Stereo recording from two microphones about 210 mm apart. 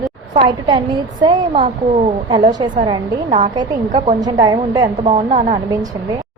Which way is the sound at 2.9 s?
25° right (ahead or behind).